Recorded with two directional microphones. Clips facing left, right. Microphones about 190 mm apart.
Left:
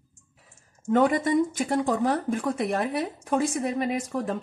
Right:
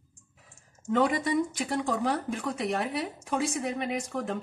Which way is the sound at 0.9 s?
50° left (ahead or behind).